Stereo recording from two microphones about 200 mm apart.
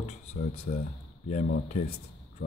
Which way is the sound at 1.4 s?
50° left (ahead or behind).